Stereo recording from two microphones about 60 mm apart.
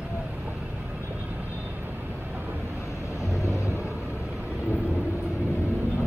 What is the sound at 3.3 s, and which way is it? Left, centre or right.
Vehicle, left.